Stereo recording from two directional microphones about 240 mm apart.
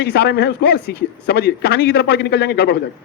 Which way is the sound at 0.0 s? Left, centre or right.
Left.